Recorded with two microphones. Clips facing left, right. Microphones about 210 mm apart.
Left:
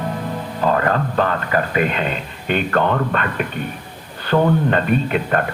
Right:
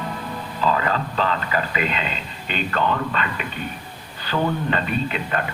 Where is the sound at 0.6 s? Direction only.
55° left (ahead or behind).